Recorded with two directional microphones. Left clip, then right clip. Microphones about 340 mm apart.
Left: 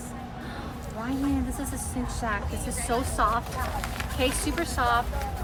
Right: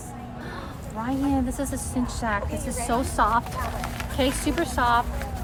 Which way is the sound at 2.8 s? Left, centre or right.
Centre.